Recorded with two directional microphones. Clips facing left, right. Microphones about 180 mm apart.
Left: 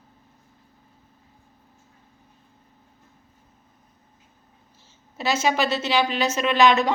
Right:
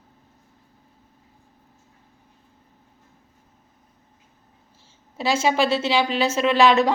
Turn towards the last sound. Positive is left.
turn(degrees=-30)  # may be behind; listen again after turning